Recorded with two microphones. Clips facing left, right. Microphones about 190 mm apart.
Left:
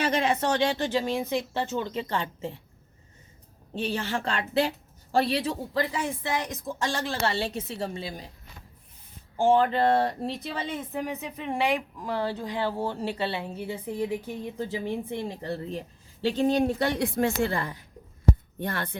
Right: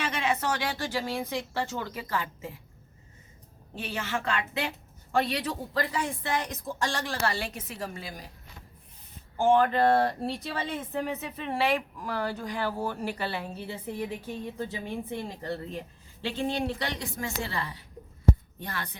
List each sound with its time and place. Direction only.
0.0 s a woman's voice: 35° left (ahead or behind)
3.8 s a woman's voice: 30° left (ahead or behind)
9.4 s a woman's voice: 25° left (ahead or behind)
16.2 s a woman's voice: 40° left (ahead or behind)